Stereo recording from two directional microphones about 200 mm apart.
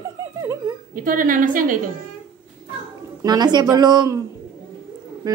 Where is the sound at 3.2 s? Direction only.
20° right (ahead or behind).